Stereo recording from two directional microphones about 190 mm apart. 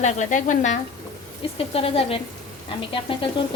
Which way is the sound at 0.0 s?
40° left (ahead or behind).